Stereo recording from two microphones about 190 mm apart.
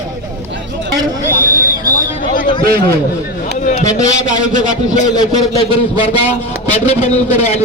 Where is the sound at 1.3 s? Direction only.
45° left (ahead or behind).